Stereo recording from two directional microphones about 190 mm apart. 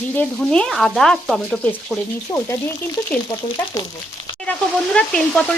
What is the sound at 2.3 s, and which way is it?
Speech, 15° left (ahead or behind).